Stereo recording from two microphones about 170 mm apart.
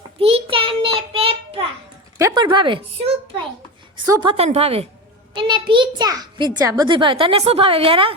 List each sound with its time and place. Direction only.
0.2 s child singing: 35° right (ahead or behind)
2.1 s a child's voice: 20° right (ahead or behind)